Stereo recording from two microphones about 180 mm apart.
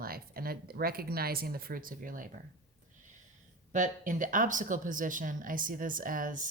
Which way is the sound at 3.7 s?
45° right (ahead or behind).